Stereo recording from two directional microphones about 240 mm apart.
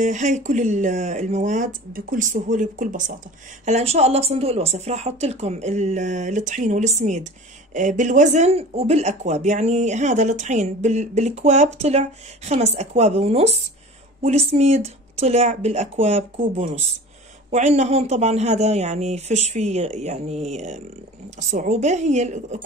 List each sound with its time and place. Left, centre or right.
0.0 s speech: right